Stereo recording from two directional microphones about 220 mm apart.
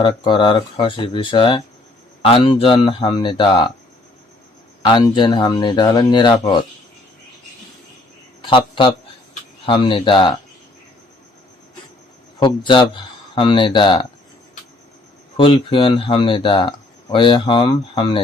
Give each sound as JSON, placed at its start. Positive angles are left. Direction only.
{"t": 0.0, "sound": "speech", "side_deg": 20}
{"t": 4.8, "sound": "speech", "side_deg": 20}
{"t": 8.4, "sound": "speech", "side_deg": 20}
{"t": 12.4, "sound": "speech", "side_deg": 20}
{"t": 15.4, "sound": "speech", "side_deg": 25}